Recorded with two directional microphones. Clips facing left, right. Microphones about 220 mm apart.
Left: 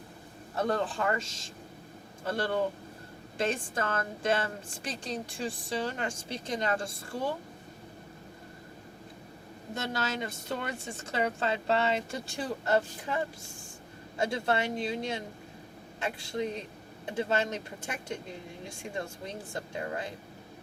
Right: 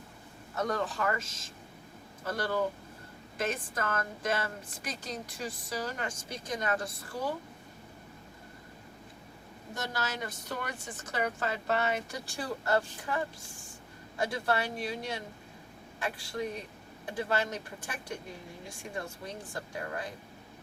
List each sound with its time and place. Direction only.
0.5 s a woman's voice: 30° left (ahead or behind)
9.7 s a woman's voice: 25° left (ahead or behind)
19.2 s a woman's voice: 25° left (ahead or behind)